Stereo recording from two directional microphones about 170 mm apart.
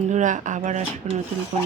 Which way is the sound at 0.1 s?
45° right (ahead or behind).